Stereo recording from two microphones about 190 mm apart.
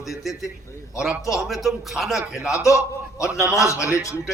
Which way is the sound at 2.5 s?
15° left (ahead or behind).